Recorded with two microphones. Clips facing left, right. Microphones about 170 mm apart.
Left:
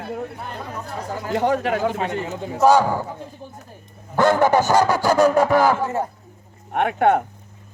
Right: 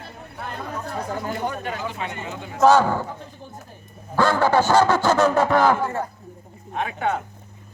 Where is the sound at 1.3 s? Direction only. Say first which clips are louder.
Left 8 dB; 90° left.